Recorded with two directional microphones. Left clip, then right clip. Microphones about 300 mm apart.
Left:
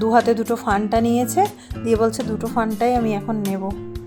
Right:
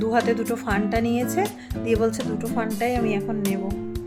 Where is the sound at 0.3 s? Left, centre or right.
Centre.